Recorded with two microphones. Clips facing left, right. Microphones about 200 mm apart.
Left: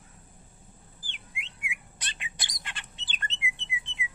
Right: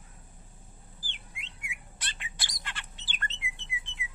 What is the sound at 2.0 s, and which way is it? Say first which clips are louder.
Bird: right 2 dB; 15° left (ahead or behind).